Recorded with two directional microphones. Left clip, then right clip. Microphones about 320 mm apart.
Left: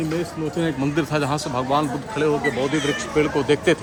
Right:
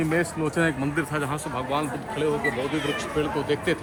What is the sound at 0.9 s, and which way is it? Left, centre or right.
Speech, left.